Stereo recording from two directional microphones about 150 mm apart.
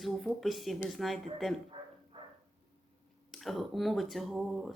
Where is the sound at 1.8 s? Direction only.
35° right (ahead or behind).